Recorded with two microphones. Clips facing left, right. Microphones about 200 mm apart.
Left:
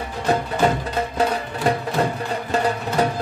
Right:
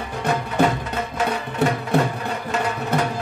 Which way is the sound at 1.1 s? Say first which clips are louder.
Left 1 dB; 35° left (ahead or behind).